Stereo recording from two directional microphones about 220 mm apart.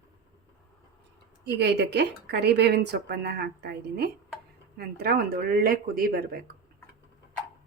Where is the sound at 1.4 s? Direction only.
50° right (ahead or behind).